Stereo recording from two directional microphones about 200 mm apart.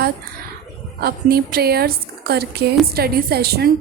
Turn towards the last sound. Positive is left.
turn(degrees=-50)  # may be behind; listen again after turning